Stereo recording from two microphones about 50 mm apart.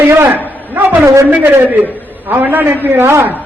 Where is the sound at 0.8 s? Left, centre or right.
Right.